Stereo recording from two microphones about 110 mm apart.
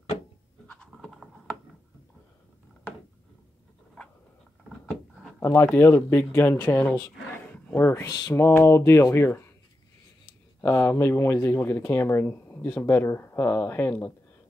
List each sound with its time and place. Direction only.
0.7 s a sound: 10° left (ahead or behind)
5.4 s speech: 25° left (ahead or behind)
10.6 s speech: 20° left (ahead or behind)